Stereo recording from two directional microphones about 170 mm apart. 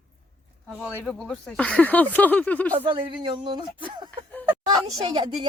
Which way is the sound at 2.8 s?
30° right (ahead or behind).